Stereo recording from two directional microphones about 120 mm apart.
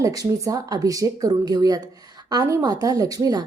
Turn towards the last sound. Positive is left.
turn(degrees=-30)  # may be behind; listen again after turning